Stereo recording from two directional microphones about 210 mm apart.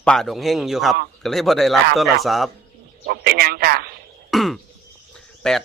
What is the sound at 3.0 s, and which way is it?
Speech, 50° right (ahead or behind).